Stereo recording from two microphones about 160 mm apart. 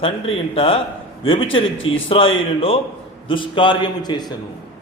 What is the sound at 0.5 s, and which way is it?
A man's voice, 35° left (ahead or behind).